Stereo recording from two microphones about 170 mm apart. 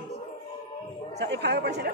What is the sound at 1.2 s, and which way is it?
Speech, 85° right.